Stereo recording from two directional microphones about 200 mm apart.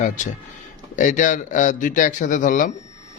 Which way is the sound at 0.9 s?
40° left (ahead or behind).